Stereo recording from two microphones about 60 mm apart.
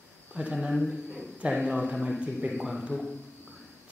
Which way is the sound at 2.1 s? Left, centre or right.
Centre.